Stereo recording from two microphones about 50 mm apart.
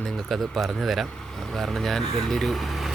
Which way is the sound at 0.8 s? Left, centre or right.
Centre.